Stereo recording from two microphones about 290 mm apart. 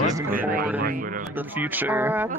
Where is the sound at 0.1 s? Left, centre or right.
Centre.